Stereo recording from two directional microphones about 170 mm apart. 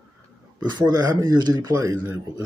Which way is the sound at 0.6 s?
25° right (ahead or behind).